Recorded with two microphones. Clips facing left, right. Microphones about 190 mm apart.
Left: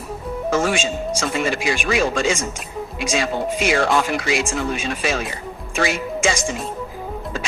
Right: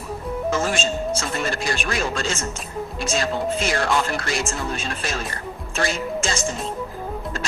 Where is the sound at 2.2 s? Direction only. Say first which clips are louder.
Left 5 dB; 10° left (ahead or behind).